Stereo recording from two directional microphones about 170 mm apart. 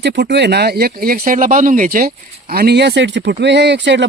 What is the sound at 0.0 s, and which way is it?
Speech, 90° right.